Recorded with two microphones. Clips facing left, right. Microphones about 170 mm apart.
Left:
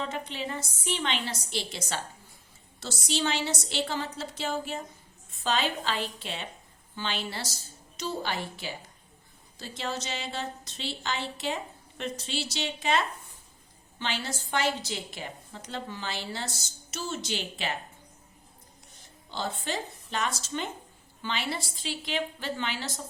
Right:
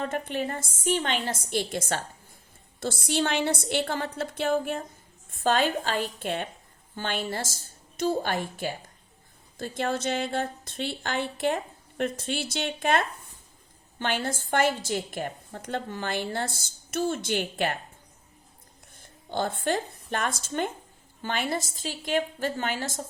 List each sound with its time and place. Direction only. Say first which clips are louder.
0.0 s a woman's voice: right 5 dB; 50° right (ahead or behind)
18.9 s a woman's voice: right 7 dB; 50° right (ahead or behind)